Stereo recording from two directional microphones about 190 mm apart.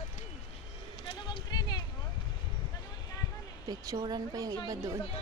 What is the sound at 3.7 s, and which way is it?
A woman's voice, 20° right (ahead or behind).